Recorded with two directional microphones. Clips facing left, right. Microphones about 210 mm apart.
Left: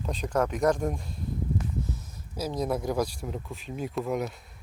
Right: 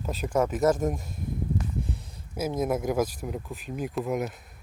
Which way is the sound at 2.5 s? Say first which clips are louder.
Right 2 dB; 20° right (ahead or behind).